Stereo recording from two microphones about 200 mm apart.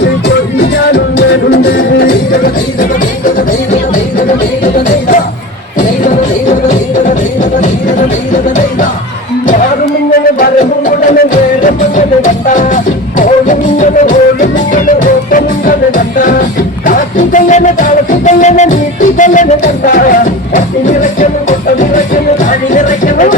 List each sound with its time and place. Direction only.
0.9 s music: 55° left (ahead or behind)
4.6 s music: 40° left (ahead or behind)
8.3 s music: 40° left (ahead or behind)
10.1 s music: 45° left (ahead or behind)